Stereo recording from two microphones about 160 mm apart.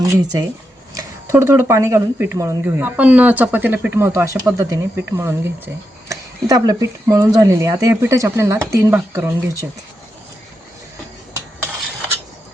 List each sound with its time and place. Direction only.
0.0 s speech: 20° right (ahead or behind)